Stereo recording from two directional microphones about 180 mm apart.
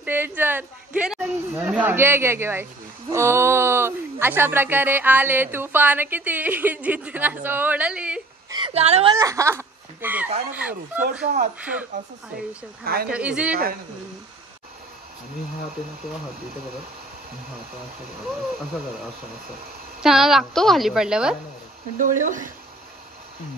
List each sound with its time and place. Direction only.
0.0 s speech: 10° right (ahead or behind)
8.5 s a sound: 25° right (ahead or behind)
9.2 s speech: 15° right (ahead or behind)
11.9 s speech: 45° right (ahead or behind)
12.8 s speech: 60° right (ahead or behind)
13.1 s speech: 5° right (ahead or behind)
20.0 s a woman's voice: centre (ahead or behind)
21.9 s speech: 45° right (ahead or behind)